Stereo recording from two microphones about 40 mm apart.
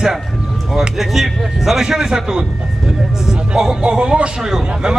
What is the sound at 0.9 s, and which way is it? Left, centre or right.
A man's voice, centre.